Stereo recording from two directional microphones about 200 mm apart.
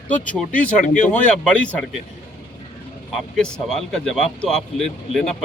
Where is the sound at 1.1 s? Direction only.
5° left (ahead or behind).